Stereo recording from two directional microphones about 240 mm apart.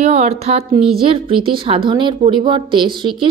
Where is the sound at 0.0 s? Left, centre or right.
Right.